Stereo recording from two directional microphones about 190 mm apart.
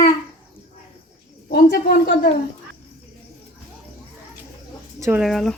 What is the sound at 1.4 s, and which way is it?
Speech, 55° left (ahead or behind).